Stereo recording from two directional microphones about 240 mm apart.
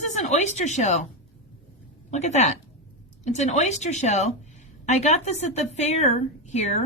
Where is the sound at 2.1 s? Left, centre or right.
Left.